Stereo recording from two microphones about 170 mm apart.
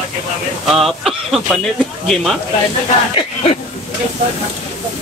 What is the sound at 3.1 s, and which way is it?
Speech, 35° left (ahead or behind).